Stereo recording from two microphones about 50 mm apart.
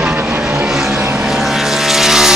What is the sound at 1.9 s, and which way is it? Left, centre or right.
Vehicle, centre.